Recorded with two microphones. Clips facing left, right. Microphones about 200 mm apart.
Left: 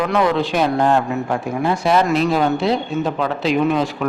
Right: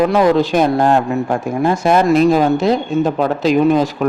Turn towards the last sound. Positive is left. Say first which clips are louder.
# right 5 dB
turn(degrees=-40)  # may be behind; listen again after turning